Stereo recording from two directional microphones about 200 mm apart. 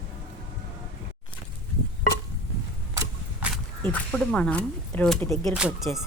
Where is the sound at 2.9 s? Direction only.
5° right (ahead or behind).